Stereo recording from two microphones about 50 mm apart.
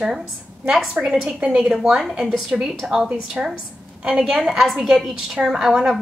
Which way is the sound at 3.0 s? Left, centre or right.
Centre.